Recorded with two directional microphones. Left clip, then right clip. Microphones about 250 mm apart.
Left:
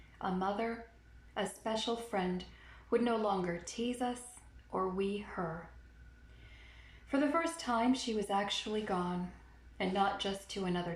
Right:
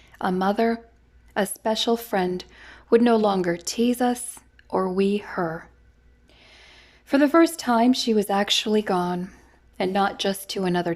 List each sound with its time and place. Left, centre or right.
0.2 s speech: right
7.1 s speech: right